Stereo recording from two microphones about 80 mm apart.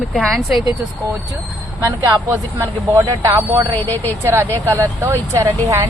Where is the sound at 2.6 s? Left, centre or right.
Right.